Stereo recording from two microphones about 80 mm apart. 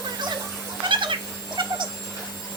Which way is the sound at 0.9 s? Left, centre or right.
Right.